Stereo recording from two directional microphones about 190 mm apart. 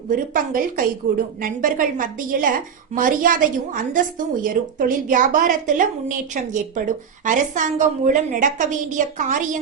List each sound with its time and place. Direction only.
0.1 s a woman's voice: 50° right (ahead or behind)